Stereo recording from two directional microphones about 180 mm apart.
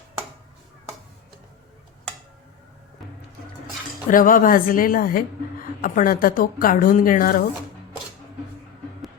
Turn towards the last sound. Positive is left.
turn(degrees=50)  # may be behind; listen again after turning